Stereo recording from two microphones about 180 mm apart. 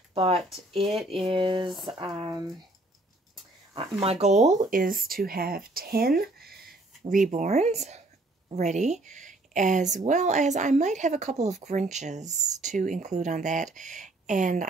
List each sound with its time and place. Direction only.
0.1 s speech: 30° right (ahead or behind)
1.7 s speech: centre (ahead or behind)
2.1 s speech: 25° right (ahead or behind)
4.0 s speech: 35° right (ahead or behind); by 6.6 s 60° right (ahead or behind)
7.0 s speech: 45° right (ahead or behind)